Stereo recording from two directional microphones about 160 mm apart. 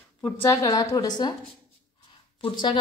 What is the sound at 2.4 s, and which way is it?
Speech, 30° left (ahead or behind).